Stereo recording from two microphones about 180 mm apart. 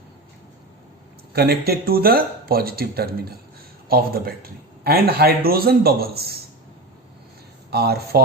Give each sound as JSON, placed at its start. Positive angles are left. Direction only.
{"t": 1.3, "sound": "a man's voice", "side_deg": -60}
{"t": 7.7, "sound": "a man's voice", "side_deg": -60}